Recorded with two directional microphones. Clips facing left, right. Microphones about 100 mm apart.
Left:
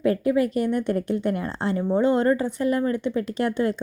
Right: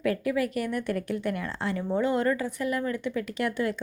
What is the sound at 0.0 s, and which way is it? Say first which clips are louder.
A woman's voice: left 6 dB; 30° left (ahead or behind).